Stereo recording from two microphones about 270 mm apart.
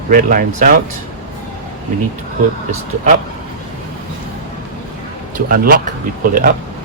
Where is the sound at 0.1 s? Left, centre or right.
Right.